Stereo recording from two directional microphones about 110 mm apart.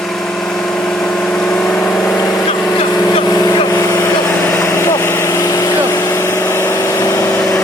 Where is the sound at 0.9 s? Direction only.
10° left (ahead or behind).